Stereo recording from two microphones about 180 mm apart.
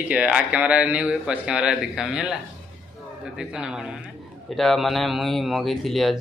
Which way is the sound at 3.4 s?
5° right (ahead or behind).